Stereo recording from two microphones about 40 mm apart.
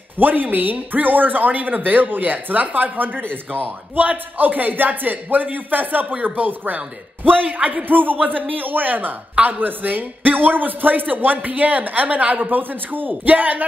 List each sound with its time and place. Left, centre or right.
0.2 s a man's voice: right
9.3 s a man's voice: right